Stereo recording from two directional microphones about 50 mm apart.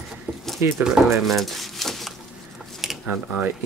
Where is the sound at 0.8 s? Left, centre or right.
Centre.